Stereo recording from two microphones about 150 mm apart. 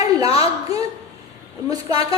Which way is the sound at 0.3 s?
20° right (ahead or behind).